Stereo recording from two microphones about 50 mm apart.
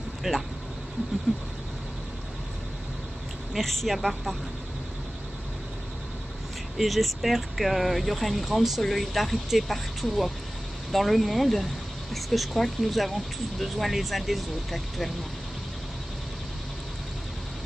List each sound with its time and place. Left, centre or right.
0.2 s speech: centre
3.5 s speech: centre
6.8 s speech: centre